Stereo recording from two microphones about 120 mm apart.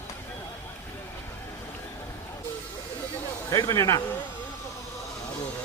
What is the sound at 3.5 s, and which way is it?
Speech, 25° left (ahead or behind).